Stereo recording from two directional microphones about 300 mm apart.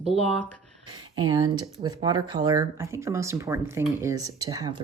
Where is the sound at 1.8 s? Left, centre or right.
Centre.